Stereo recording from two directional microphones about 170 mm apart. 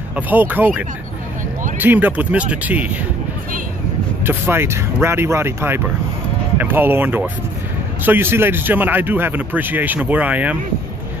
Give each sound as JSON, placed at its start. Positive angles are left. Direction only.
{"t": 0.1, "sound": "a man's voice", "side_deg": -10}
{"t": 4.3, "sound": "a man's voice", "side_deg": -15}